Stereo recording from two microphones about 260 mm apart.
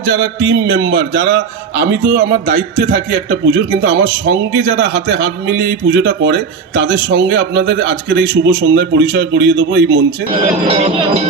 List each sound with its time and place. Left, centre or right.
0.3 s a man's voice: right
10.7 s speech: right